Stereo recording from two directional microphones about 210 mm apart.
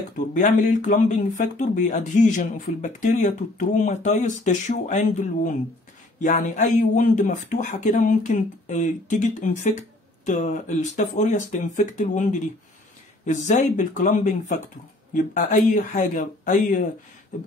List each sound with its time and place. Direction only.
0.3 s speech: 35° left (ahead or behind)
17.3 s beatboxing: 35° left (ahead or behind)